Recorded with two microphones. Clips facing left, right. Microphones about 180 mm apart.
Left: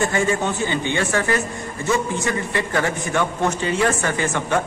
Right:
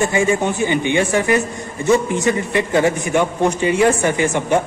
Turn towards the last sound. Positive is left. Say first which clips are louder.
# right 5 dB
turn(degrees=-15)  # may be behind; listen again after turning